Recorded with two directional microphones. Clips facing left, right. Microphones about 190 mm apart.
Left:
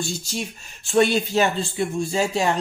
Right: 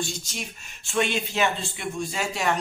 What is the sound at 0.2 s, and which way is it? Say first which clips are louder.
Speech: left 7 dB; 35° left (ahead or behind).